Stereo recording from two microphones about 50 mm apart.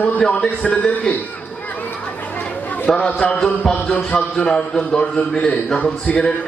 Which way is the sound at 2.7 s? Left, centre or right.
Left.